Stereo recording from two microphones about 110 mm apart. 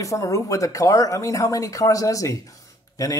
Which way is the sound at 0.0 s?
30° left (ahead or behind).